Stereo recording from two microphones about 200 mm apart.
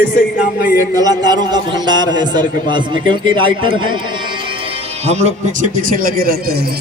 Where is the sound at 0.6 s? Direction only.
45° left (ahead or behind).